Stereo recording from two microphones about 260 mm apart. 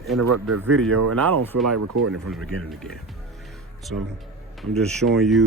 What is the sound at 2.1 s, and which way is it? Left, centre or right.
Speech, centre.